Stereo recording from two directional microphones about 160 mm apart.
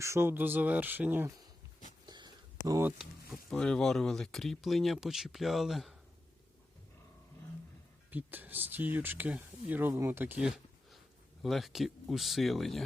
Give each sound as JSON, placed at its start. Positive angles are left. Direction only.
{"t": 0.0, "sound": "speech", "side_deg": -15}
{"t": 2.0, "sound": "a sound", "side_deg": -25}
{"t": 3.5, "sound": "speech", "side_deg": 5}
{"t": 8.1, "sound": "speech", "side_deg": -10}
{"t": 11.4, "sound": "speech", "side_deg": 0}